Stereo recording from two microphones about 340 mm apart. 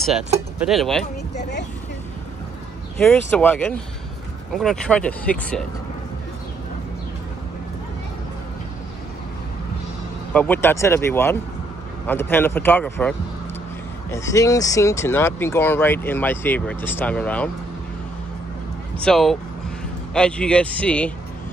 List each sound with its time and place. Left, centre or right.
0.7 s speech: centre
1.3 s speech: left
3.0 s speech: centre
10.3 s speech: centre
14.1 s speech: centre
19.0 s speech: centre